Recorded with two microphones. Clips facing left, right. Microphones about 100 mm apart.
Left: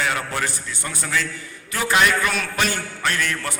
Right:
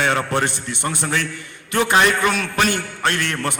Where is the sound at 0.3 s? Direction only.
20° right (ahead or behind).